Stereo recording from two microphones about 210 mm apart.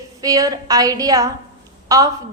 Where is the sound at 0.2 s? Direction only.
15° right (ahead or behind).